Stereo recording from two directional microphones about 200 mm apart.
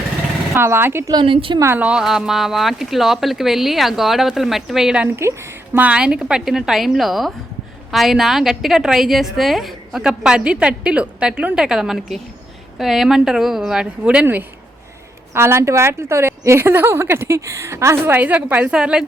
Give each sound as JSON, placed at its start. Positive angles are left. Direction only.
{"t": 0.5, "sound": "a woman's voice", "side_deg": -10}
{"t": 1.2, "sound": "a woman's voice", "side_deg": -25}
{"t": 1.6, "sound": "a woman's voice", "side_deg": -10}